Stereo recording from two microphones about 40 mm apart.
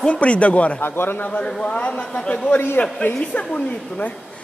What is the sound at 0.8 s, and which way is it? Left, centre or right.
Speech, left.